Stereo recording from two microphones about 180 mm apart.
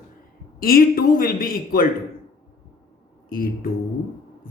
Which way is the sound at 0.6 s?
55° left (ahead or behind).